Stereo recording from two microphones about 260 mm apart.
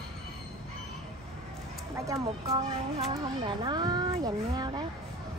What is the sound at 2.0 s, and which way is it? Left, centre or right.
Speech, centre.